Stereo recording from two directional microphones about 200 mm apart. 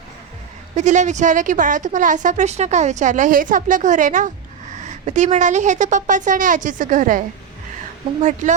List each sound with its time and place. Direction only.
0.8 s a woman's voice: 35° right (ahead or behind)